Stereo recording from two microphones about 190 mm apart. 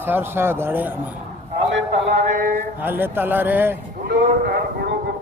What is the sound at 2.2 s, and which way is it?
Speech, 45° right (ahead or behind).